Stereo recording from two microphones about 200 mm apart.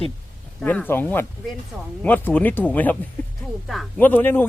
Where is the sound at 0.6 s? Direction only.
10° left (ahead or behind).